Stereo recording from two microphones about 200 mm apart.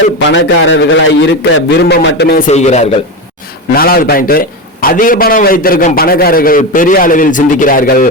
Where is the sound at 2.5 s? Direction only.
35° left (ahead or behind).